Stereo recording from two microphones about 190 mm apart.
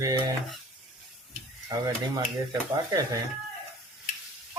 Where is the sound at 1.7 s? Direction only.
20° right (ahead or behind).